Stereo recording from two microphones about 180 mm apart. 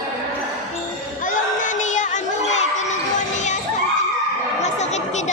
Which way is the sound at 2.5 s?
40° left (ahead or behind).